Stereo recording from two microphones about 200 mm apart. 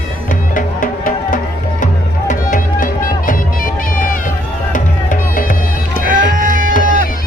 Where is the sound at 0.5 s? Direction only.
45° left (ahead or behind).